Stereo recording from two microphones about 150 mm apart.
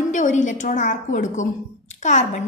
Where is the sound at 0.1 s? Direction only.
55° left (ahead or behind).